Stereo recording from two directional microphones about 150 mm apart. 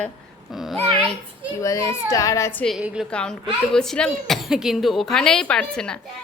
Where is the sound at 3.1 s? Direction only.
5° left (ahead or behind).